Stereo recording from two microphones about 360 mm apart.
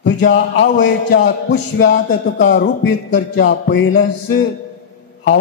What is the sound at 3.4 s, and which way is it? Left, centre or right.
Speech, left.